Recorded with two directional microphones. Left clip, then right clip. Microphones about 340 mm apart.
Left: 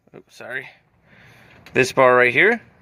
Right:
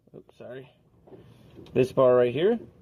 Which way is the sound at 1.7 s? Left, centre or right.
Left.